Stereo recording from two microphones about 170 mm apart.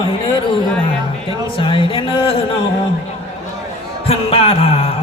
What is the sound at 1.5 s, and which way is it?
A man's voice, 30° left (ahead or behind).